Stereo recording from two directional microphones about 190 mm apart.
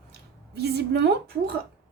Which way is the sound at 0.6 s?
60° right (ahead or behind).